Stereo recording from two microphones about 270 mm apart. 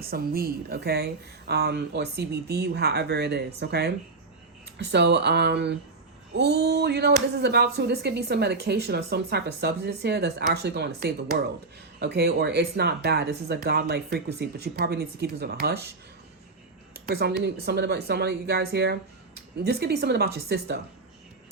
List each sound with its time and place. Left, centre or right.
0.0 s speech: right
16.9 s speech: right